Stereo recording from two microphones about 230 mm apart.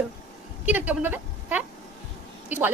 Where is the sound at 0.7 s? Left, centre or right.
Centre.